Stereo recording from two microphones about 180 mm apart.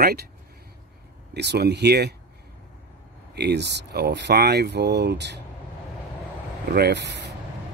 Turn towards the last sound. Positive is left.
turn(degrees=-75)  # may be behind; listen again after turning